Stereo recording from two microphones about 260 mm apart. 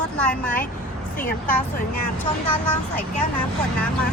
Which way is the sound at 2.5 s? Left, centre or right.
Centre.